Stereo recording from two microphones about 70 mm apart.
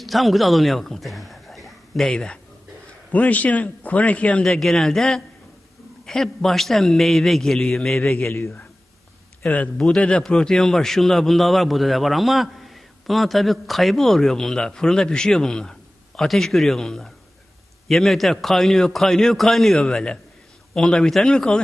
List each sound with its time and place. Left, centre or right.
0.0 s a sound: centre
3.1 s speech: left
4.4 s a man's voice: centre
8.3 s speech: left
9.5 s a man's voice: centre